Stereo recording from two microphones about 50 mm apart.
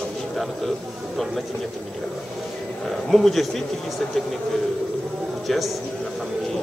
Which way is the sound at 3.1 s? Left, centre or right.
Centre.